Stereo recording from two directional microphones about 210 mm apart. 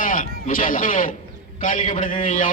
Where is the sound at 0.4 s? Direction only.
40° left (ahead or behind).